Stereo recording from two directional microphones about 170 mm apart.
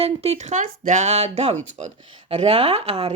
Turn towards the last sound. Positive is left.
turn(degrees=-35)  # may be behind; listen again after turning